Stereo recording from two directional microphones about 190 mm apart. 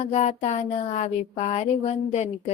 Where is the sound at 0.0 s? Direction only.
35° left (ahead or behind).